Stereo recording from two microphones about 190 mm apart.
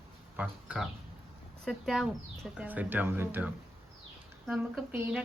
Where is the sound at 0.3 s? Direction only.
5° right (ahead or behind).